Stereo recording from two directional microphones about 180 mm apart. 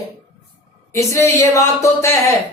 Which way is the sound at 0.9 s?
15° left (ahead or behind).